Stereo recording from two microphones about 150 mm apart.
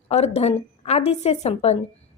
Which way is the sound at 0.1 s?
45° left (ahead or behind).